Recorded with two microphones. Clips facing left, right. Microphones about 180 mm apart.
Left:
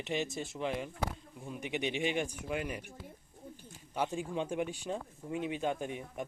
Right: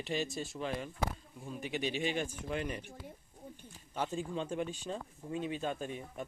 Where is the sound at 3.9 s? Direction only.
10° left (ahead or behind).